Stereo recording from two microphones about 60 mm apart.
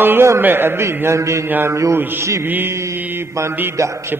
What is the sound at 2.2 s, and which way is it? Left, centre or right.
Speech, right.